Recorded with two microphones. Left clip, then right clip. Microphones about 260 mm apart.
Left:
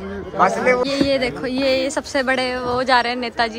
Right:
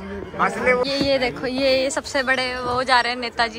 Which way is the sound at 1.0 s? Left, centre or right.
Centre.